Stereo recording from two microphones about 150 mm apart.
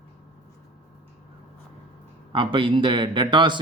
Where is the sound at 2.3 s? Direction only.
35° right (ahead or behind).